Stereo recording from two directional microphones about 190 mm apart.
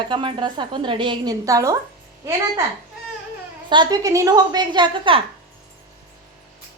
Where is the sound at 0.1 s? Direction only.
25° right (ahead or behind).